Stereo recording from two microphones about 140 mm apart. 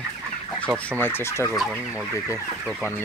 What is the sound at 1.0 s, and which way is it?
Fowl, 15° left (ahead or behind).